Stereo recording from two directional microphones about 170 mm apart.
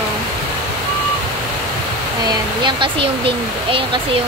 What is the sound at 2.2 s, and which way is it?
Speech, 30° right (ahead or behind).